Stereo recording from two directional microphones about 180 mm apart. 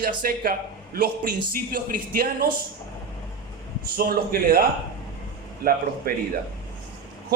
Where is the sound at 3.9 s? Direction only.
55° right (ahead or behind).